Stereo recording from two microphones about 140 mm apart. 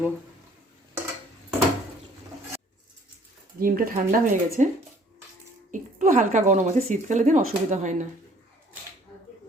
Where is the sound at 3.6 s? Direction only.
90° right.